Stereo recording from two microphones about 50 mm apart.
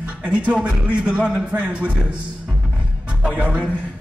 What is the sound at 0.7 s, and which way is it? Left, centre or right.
Music, right.